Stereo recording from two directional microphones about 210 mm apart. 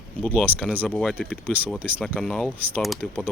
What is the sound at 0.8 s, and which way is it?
Speech, 5° left (ahead or behind).